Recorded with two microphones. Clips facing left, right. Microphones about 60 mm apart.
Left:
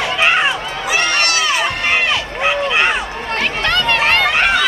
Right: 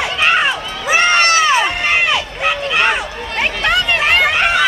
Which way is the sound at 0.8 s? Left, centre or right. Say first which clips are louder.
Right 5 dB; right.